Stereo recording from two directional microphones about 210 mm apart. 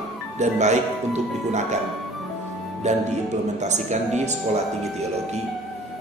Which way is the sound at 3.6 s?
35° right (ahead or behind).